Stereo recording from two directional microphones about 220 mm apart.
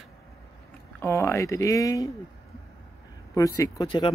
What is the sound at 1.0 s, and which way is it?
Speech, 10° left (ahead or behind).